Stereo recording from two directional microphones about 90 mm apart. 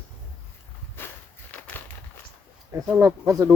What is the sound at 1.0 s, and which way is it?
Walk, 25° left (ahead or behind).